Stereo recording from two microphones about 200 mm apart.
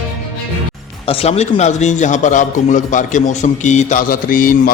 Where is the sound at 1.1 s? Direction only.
30° left (ahead or behind).